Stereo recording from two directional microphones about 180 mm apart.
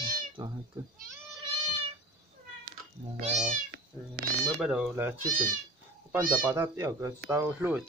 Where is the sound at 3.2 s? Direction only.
40° right (ahead or behind).